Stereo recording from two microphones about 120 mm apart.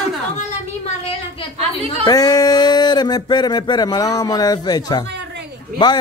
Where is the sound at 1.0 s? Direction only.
50° left (ahead or behind).